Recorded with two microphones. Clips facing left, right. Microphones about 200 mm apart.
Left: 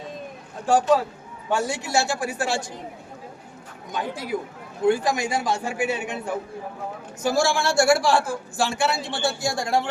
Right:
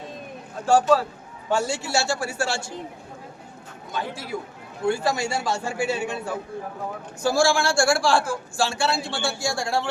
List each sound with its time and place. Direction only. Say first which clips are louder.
1.5 s a man's voice: right 1 dB; 15° left (ahead or behind)
3.9 s a man's voice: left 3 dB; 20° left (ahead or behind)